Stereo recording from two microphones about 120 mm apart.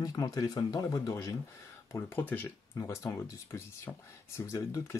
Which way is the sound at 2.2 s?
15° left (ahead or behind).